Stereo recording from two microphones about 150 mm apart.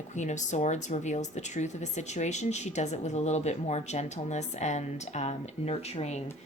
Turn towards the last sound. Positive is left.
turn(degrees=45)  # may be behind; listen again after turning